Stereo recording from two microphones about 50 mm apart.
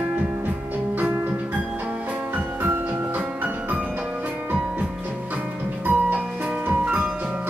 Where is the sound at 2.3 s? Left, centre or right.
Right.